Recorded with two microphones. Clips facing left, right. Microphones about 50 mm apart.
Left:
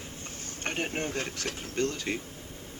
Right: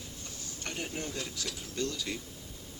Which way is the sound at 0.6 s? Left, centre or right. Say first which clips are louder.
Left 6 dB; left.